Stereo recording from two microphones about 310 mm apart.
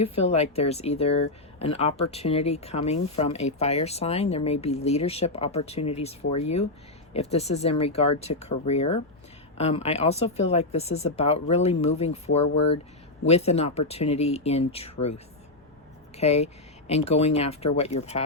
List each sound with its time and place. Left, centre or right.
0.0 s speech: centre
16.1 s speech: left